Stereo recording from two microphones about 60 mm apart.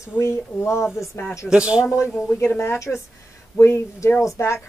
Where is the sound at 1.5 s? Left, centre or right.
Centre.